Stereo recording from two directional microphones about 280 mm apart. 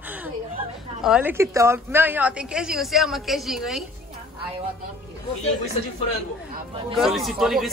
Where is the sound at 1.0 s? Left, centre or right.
Centre.